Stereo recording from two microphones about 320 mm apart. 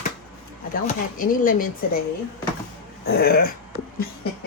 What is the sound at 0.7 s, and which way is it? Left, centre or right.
Speech, left.